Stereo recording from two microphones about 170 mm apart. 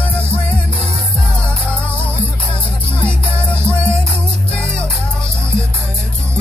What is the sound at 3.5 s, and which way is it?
Music, 5° left (ahead or behind).